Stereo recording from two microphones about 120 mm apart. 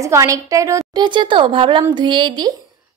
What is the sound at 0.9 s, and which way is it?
A woman's voice, 40° right (ahead or behind).